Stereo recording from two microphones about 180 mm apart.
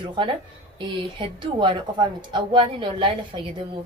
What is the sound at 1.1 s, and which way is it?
Speech, 25° right (ahead or behind).